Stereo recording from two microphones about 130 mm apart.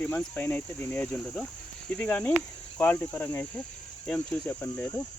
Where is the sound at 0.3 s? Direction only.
15° left (ahead or behind).